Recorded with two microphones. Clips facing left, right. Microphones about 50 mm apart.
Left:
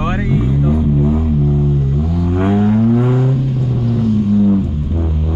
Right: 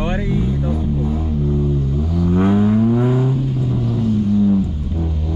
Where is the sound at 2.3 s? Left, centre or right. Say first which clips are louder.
Left 1 dB; centre.